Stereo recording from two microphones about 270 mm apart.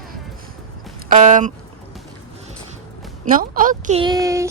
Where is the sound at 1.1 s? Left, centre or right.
Right.